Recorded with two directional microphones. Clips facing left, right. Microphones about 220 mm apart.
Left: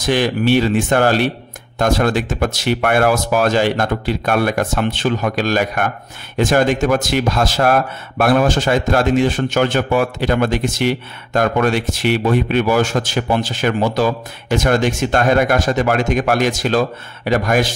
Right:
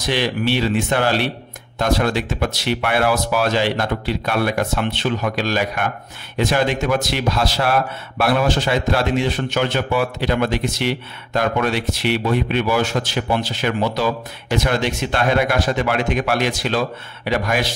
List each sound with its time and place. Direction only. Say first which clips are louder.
0.0 s speech: left 4 dB; 50° left (ahead or behind)